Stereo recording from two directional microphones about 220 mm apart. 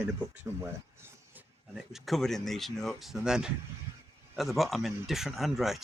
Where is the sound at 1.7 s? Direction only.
Centre (ahead or behind).